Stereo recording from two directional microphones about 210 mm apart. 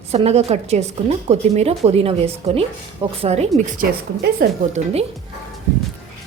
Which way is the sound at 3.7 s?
45° right (ahead or behind).